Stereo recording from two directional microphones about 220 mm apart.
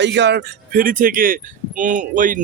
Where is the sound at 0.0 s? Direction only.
50° right (ahead or behind).